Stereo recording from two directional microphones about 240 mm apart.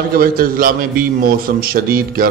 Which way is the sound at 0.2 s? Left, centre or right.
Right.